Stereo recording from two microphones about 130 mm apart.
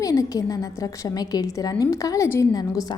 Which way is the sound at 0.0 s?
25° left (ahead or behind).